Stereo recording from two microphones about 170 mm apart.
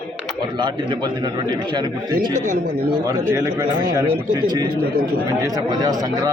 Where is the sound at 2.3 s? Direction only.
50° right (ahead or behind).